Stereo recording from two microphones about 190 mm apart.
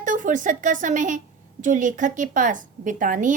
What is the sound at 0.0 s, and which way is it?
A woman's voice, 40° right (ahead or behind).